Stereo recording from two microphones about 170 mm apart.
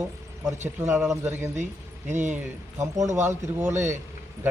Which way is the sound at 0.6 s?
15° right (ahead or behind).